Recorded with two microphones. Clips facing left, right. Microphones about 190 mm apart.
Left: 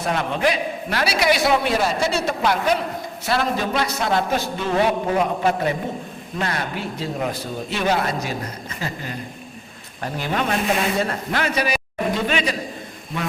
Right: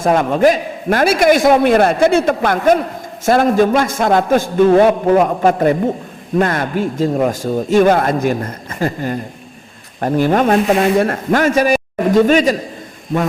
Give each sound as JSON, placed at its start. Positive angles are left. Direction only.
{"t": 0.0, "sound": "a man's voice", "side_deg": -45}